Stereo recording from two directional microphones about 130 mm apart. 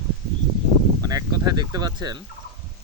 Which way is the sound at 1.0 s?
30° right (ahead or behind).